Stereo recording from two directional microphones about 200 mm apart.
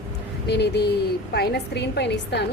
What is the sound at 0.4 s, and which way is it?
A woman's voice, 55° left (ahead or behind).